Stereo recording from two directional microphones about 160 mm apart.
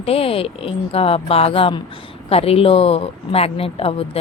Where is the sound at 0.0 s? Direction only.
35° left (ahead or behind).